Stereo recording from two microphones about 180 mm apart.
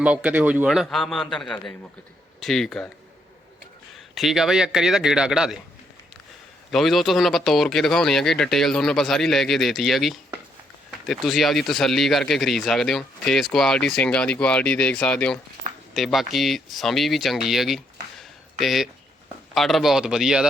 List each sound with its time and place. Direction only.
0.0 s speech: 5° right (ahead or behind)
4.1 s speech: centre (ahead or behind)
6.7 s speech: centre (ahead or behind)
18.2 s a sound: centre (ahead or behind)
19.5 s speech: centre (ahead or behind)